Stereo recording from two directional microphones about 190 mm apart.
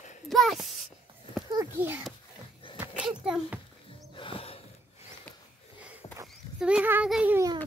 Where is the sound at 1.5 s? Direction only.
15° right (ahead or behind).